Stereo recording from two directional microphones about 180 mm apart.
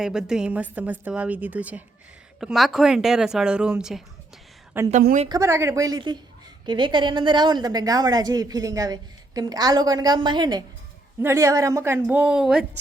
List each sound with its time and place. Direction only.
0.0 s a woman's voice: 5° right (ahead or behind)